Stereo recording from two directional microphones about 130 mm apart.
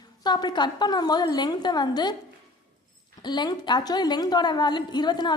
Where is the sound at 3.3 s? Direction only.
35° left (ahead or behind).